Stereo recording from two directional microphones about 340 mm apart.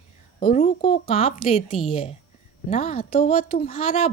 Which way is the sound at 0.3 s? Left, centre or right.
Centre.